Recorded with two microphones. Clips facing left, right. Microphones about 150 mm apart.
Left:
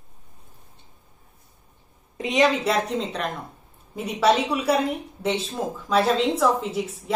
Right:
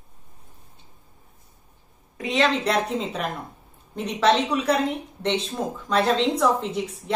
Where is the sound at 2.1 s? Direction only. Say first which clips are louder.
Left 2 dB; 20° left (ahead or behind).